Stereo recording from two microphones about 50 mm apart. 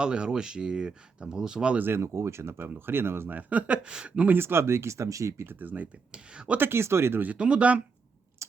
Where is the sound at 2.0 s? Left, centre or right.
Right.